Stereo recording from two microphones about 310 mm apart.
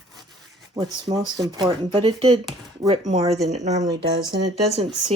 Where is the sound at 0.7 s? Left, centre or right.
Centre.